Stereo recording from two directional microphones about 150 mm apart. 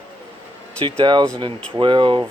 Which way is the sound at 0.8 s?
35° right (ahead or behind).